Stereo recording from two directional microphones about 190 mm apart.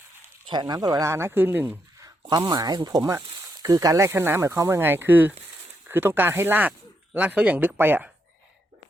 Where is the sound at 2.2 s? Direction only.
20° right (ahead or behind).